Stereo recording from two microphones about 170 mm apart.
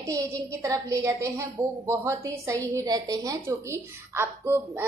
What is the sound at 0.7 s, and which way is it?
A woman's voice, 20° right (ahead or behind).